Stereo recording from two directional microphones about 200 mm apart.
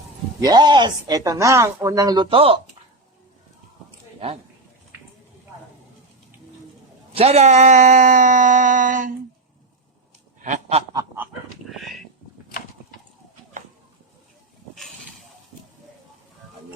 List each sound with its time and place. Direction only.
0.3 s speech: 20° right (ahead or behind)
7.1 s speech: 30° right (ahead or behind)
10.4 s duck: 35° right (ahead or behind)
10.9 s goose: 10° right (ahead or behind)
11.7 s a sound: centre (ahead or behind)